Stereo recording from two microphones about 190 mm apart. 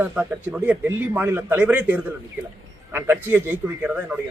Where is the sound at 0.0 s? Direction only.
10° right (ahead or behind).